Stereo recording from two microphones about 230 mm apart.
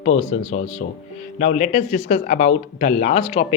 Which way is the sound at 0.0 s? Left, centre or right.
Left.